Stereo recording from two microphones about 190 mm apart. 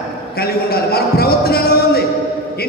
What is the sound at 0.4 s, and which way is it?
Music, 55° left (ahead or behind).